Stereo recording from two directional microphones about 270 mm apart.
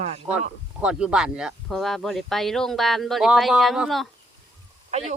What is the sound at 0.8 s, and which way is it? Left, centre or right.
Speech, centre.